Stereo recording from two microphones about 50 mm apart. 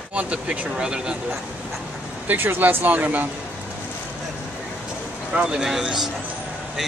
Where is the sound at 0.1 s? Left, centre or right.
Right.